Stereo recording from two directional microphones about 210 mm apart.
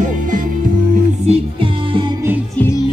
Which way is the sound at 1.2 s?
25° right (ahead or behind).